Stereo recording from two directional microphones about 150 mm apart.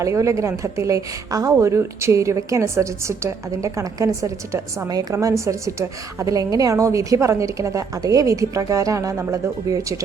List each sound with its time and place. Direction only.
0.0 s a woman's voice: 20° right (ahead or behind)